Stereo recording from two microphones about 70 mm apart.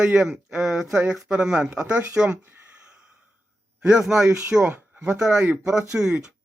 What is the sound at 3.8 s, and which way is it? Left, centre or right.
Speech, centre.